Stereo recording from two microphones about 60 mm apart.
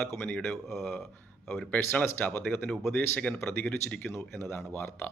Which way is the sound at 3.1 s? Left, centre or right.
Left.